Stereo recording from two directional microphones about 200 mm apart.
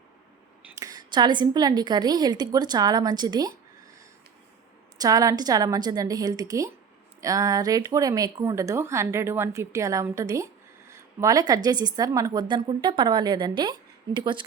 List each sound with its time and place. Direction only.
0.8 s a woman's voice: 20° right (ahead or behind)
4.9 s a woman's voice: 15° right (ahead or behind)